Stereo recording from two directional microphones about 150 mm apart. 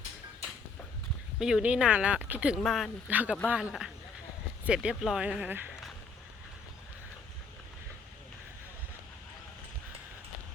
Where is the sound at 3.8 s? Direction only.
5° right (ahead or behind).